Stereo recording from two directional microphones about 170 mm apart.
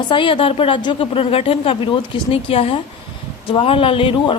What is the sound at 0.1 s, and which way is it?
Speech, 30° left (ahead or behind).